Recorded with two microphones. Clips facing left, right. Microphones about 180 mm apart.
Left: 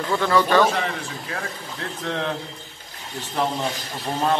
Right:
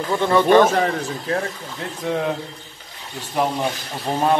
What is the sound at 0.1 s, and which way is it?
Speech, 20° right (ahead or behind).